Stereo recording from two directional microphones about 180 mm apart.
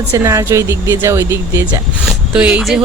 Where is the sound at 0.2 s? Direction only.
15° right (ahead or behind).